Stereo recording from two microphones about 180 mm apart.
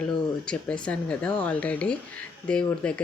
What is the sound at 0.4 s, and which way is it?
Speech, 5° left (ahead or behind).